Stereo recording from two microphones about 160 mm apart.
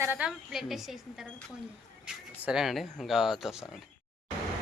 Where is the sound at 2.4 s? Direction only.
5° right (ahead or behind).